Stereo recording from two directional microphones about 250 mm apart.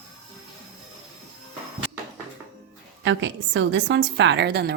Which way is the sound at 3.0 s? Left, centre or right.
Right.